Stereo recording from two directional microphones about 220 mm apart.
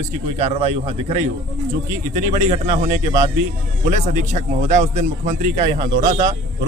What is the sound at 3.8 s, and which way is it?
Speech, 30° right (ahead or behind).